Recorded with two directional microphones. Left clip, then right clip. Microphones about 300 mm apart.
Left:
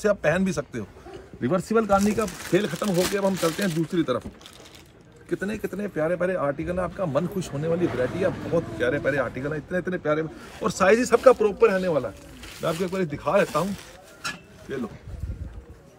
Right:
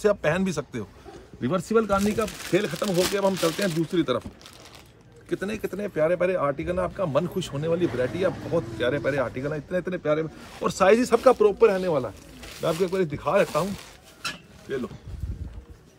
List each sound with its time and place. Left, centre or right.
0.0 s a man's voice: right
1.6 s speech: centre
3.8 s speech: centre
5.6 s speech: centre
8.7 s a man's voice: right
14.2 s mechanisms: centre